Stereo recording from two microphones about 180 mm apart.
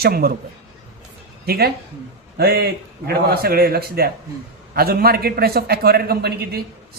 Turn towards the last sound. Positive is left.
turn(degrees=-65)  # may be behind; listen again after turning